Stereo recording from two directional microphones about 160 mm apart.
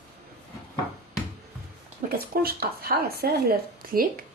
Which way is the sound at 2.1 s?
70° right (ahead or behind).